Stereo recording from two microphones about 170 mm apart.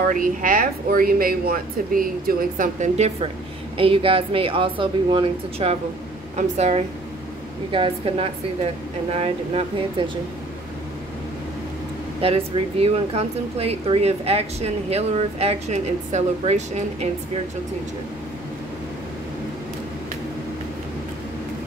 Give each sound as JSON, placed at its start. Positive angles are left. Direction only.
{"t": 0.0, "sound": "speech", "side_deg": -55}
{"t": 3.7, "sound": "speech", "side_deg": -30}
{"t": 7.7, "sound": "speech", "side_deg": -30}
{"t": 12.2, "sound": "speech", "side_deg": -35}